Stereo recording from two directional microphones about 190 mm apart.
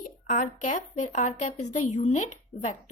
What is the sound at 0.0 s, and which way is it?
A woman's voice, 45° left (ahead or behind).